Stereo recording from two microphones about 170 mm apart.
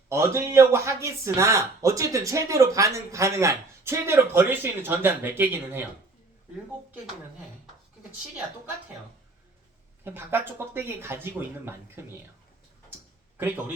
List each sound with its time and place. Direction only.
0.1 s speech: 15° right (ahead or behind)
10.0 s speech: 10° right (ahead or behind)